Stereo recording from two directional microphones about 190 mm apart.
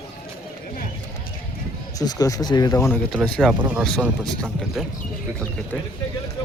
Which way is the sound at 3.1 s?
Centre (ahead or behind).